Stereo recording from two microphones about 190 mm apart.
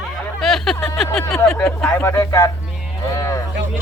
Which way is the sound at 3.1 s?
15° left (ahead or behind).